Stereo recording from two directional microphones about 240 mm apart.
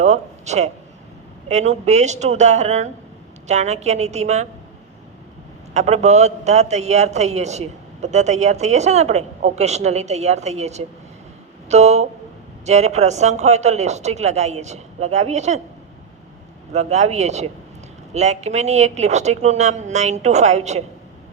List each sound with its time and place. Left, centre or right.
0.0 s a man's voice: right
5.7 s a man's voice: right
16.7 s a man's voice: right